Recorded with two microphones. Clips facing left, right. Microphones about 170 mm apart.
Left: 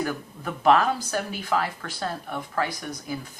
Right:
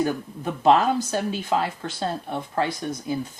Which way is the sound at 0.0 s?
20° right (ahead or behind).